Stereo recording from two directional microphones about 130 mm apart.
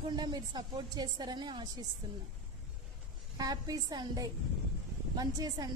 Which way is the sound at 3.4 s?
30° right (ahead or behind).